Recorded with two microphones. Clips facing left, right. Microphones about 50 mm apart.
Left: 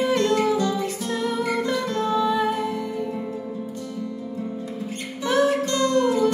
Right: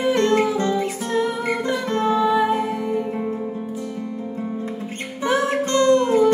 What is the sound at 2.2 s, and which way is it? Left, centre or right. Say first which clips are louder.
Music: right 3 dB; centre.